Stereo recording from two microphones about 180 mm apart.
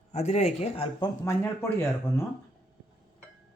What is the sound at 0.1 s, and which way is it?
Speech, 35° left (ahead or behind).